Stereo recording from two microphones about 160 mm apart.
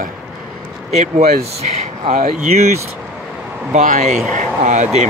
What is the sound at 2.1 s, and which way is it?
Speech, 55° right (ahead or behind).